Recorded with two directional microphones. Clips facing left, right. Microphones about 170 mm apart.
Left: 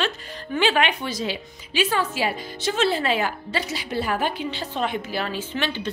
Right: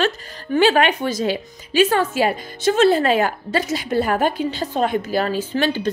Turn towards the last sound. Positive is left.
turn(degrees=-40)  # may be behind; listen again after turning